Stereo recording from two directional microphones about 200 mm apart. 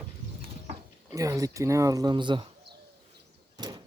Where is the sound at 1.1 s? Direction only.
15° right (ahead or behind).